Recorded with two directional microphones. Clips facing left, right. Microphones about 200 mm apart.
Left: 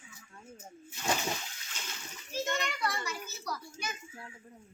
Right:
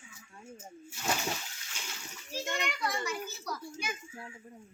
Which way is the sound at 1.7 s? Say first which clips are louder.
Right 1 dB; 10° right (ahead or behind).